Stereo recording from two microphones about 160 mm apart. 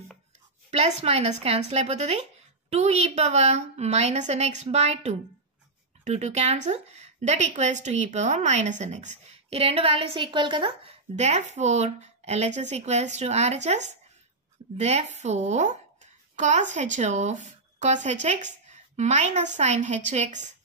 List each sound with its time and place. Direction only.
0.7 s a child's voice: 45° right (ahead or behind)